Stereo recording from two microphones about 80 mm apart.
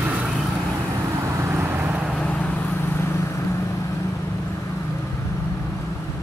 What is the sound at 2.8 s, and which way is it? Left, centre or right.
Vehicle, left.